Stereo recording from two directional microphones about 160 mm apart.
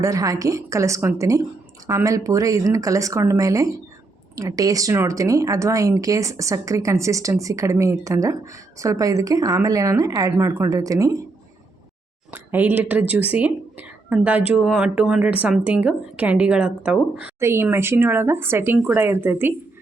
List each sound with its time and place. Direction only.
0.0 s speech: 20° right (ahead or behind)
12.3 s speech: 10° right (ahead or behind)